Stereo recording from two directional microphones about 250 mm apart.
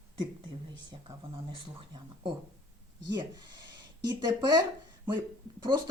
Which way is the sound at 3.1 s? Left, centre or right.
Centre.